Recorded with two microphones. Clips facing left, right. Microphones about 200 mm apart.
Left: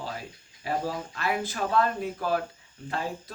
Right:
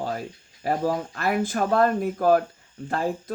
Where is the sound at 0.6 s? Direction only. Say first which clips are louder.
Right 6 dB; 45° right (ahead or behind).